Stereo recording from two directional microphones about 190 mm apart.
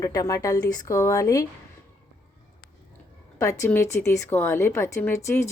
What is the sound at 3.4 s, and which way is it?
A woman's voice, 15° left (ahead or behind).